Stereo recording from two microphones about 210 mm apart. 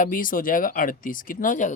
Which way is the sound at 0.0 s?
40° left (ahead or behind).